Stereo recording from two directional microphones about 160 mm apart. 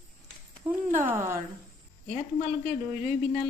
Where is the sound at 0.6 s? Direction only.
15° right (ahead or behind).